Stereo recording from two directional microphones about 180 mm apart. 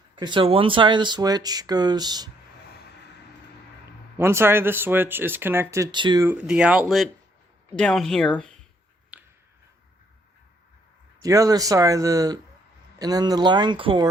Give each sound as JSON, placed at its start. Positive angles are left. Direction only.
{"t": 0.2, "sound": "speech", "side_deg": -25}
{"t": 4.2, "sound": "speech", "side_deg": -15}
{"t": 6.2, "sound": "speech", "side_deg": -5}
{"t": 9.1, "sound": "a sound", "side_deg": -5}
{"t": 11.2, "sound": "speech", "side_deg": -20}